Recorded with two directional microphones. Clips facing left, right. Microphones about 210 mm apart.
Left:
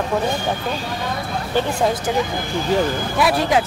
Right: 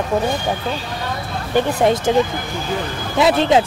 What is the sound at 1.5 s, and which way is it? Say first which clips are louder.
Speech: right 4 dB; 25° right (ahead or behind).